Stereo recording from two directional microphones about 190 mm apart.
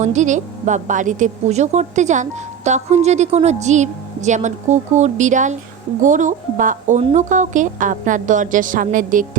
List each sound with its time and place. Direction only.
0.0 s a woman's voice: 40° right (ahead or behind)